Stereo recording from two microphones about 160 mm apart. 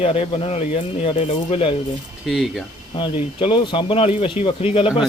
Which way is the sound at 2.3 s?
Centre (ahead or behind).